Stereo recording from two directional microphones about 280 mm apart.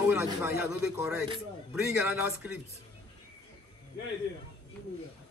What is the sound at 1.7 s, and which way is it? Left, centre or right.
Speech, centre.